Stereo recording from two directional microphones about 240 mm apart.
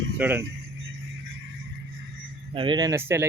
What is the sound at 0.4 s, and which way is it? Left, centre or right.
Music, right.